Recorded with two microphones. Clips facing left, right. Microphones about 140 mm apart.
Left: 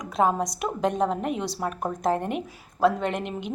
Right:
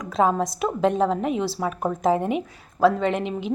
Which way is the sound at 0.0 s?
Centre (ahead or behind).